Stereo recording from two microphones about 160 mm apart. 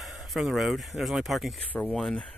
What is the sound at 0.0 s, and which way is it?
Speech, centre (ahead or behind).